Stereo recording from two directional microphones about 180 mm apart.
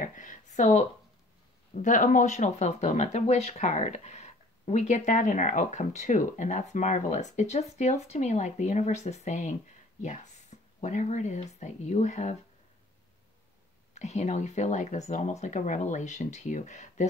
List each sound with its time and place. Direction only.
0.0 s a sound: 45° left (ahead or behind)
1.8 s speech: 45° left (ahead or behind)
13.9 s speech: 40° left (ahead or behind)